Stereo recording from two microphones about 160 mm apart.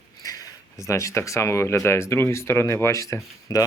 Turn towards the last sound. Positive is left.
turn(degrees=20)  # may be behind; listen again after turning